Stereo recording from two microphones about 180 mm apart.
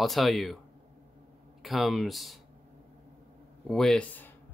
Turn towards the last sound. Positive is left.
turn(degrees=5)  # may be behind; listen again after turning